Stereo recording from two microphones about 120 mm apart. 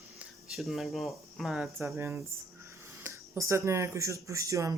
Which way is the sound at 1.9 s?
20° right (ahead or behind).